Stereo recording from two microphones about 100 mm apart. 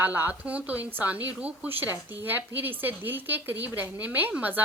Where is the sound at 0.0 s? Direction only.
20° right (ahead or behind).